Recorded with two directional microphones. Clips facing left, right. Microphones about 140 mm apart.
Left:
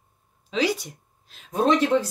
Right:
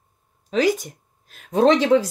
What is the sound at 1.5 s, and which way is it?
Speech, 85° right.